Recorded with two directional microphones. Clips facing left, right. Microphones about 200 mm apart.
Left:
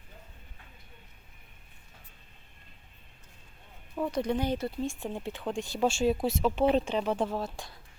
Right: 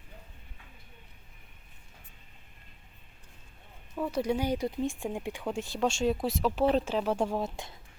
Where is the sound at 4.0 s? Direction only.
5° right (ahead or behind).